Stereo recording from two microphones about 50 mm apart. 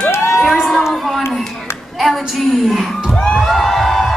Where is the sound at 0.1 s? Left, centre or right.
Left.